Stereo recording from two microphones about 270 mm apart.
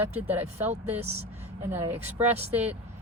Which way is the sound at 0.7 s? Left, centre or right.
Right.